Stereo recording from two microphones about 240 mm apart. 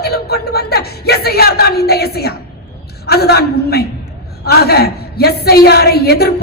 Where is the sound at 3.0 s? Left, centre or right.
Left.